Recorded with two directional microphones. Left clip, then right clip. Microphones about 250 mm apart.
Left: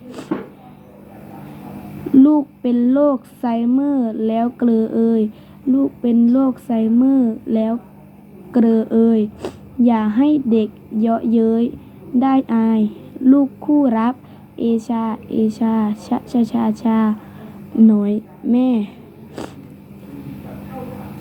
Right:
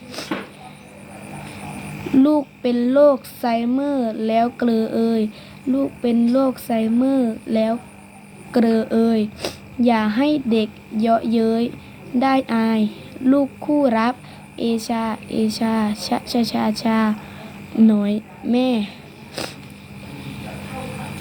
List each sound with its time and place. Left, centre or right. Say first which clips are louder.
2.1 s speech: left 4 dB; centre